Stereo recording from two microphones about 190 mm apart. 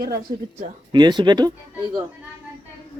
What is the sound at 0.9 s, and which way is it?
Speech, 25° right (ahead or behind).